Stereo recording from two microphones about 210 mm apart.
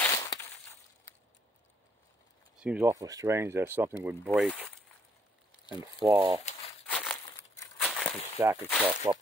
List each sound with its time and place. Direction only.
0.0 s a sound: 15° left (ahead or behind)
2.6 s speech: 10° right (ahead or behind)
4.3 s speech: 5° left (ahead or behind)
5.9 s speech: 15° right (ahead or behind)
6.9 s crumpling: 5° left (ahead or behind)
7.7 s a sound: 5° left (ahead or behind)
8.4 s speech: 10° right (ahead or behind)